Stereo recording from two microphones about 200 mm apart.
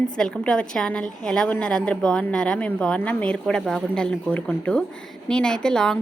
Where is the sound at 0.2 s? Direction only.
5° left (ahead or behind).